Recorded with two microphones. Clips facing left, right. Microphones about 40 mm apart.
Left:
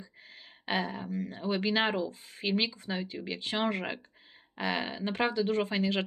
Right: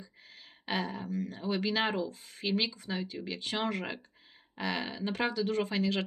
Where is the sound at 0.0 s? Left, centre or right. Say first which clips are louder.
Left 2 dB; centre.